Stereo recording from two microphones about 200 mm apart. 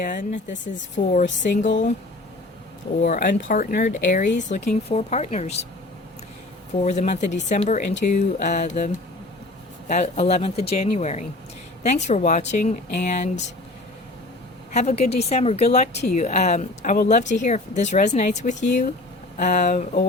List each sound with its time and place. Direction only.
0.0 s speech: 40° left (ahead or behind)
3.0 s speech: 40° left (ahead or behind)
6.8 s speech: 35° left (ahead or behind)
9.9 s speech: 35° left (ahead or behind)
14.7 s speech: 35° left (ahead or behind)